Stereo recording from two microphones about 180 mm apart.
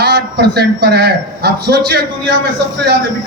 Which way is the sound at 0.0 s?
65° right (ahead or behind).